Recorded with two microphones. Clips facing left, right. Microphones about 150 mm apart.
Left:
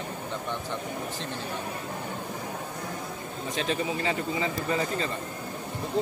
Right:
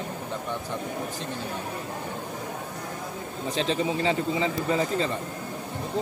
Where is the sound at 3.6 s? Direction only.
25° right (ahead or behind).